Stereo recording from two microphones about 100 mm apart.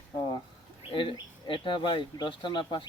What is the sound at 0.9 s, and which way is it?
Speech, 60° left (ahead or behind).